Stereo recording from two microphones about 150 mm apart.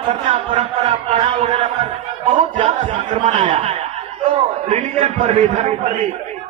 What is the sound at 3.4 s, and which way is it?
Speech, 35° right (ahead or behind).